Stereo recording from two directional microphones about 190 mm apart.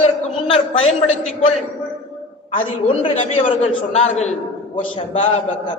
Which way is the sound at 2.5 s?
30° left (ahead or behind).